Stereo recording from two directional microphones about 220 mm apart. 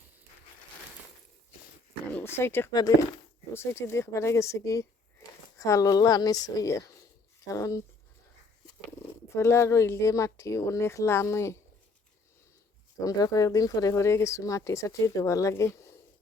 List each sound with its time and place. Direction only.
2.1 s speech: 10° left (ahead or behind)
9.0 s speech: 10° left (ahead or behind)
13.0 s speech: 15° left (ahead or behind)